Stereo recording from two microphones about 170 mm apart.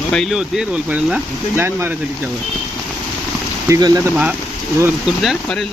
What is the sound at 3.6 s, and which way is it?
Speech, 20° right (ahead or behind).